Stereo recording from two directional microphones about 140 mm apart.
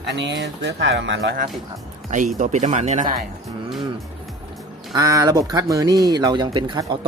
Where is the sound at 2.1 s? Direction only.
65° right (ahead or behind).